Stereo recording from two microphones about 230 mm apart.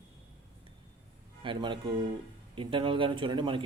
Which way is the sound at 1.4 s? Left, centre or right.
Right.